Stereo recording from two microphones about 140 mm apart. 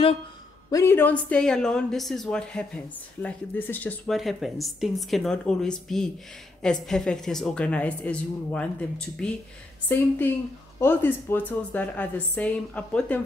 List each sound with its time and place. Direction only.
0.7 s a woman's voice: 20° left (ahead or behind)
4.1 s a woman's voice: centre (ahead or behind)